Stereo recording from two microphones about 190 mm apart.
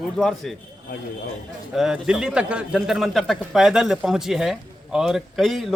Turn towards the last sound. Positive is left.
turn(degrees=0)  # may be behind; listen again after turning